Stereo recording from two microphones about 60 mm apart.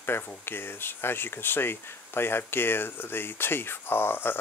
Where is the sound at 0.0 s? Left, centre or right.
Left.